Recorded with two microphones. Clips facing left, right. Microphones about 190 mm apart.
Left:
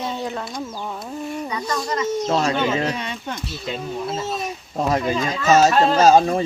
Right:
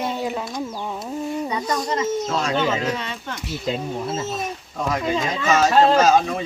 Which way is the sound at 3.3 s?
15° right (ahead or behind).